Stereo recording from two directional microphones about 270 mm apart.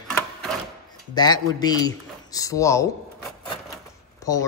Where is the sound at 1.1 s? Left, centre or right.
Centre.